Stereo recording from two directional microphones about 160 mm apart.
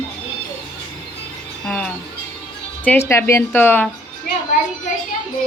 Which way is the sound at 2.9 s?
15° left (ahead or behind).